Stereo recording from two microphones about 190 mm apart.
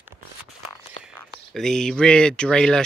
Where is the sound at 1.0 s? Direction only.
Centre (ahead or behind).